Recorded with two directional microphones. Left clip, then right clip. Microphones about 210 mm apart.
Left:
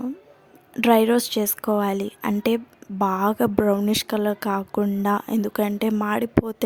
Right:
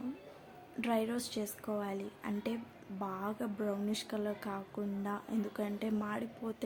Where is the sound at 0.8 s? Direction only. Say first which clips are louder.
Left 18 dB; 55° left (ahead or behind).